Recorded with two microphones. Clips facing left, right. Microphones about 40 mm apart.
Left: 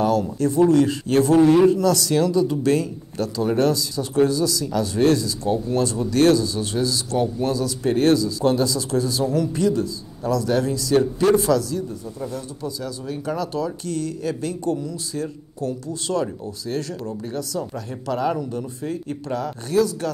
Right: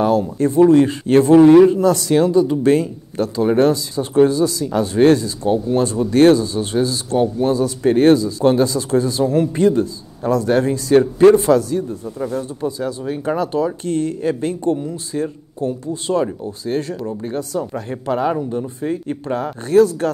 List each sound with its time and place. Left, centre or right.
0.0 s speech: right